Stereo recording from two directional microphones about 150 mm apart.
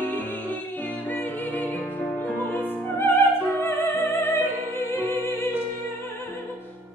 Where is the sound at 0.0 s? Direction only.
10° left (ahead or behind).